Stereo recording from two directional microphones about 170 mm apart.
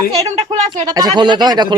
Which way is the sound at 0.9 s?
25° right (ahead or behind).